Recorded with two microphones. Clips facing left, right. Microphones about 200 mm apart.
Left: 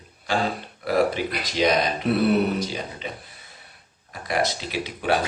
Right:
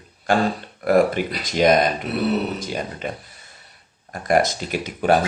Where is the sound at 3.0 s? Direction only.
50° right (ahead or behind).